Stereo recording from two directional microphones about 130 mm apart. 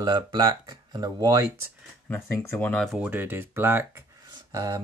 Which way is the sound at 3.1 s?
15° right (ahead or behind).